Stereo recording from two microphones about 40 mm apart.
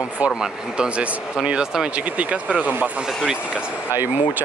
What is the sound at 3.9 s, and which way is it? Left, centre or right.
Speech, right.